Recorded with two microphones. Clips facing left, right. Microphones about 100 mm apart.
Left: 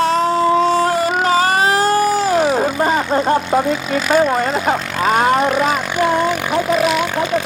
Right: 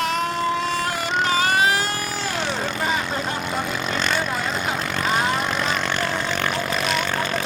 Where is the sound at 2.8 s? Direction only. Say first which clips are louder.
Left 9 dB; 45° left (ahead or behind).